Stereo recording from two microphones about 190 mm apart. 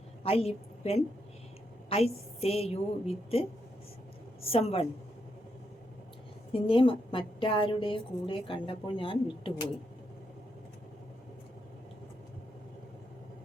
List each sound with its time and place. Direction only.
0.2 s a woman's voice: 30° left (ahead or behind)
4.5 s a woman's voice: 30° left (ahead or behind)
6.5 s a woman's voice: 30° left (ahead or behind)